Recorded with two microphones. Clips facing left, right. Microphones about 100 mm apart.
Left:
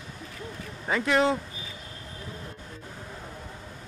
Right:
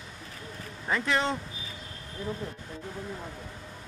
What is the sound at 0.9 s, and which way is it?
Speech, 5° left (ahead or behind).